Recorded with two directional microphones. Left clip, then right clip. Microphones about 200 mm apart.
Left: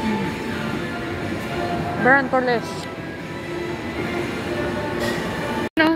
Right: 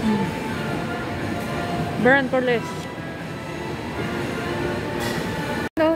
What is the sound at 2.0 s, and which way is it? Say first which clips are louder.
Speech: left 1 dB; 30° right (ahead or behind).